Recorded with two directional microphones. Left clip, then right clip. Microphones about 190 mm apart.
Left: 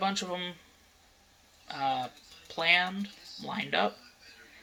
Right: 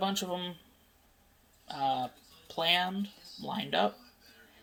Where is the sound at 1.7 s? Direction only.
10° right (ahead or behind).